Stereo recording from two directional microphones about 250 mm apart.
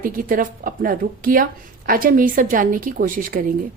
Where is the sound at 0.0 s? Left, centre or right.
Right.